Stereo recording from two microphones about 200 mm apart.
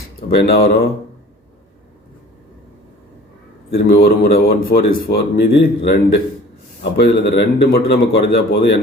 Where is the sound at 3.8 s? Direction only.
50° left (ahead or behind).